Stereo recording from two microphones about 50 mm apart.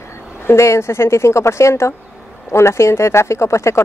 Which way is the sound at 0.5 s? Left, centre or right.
Left.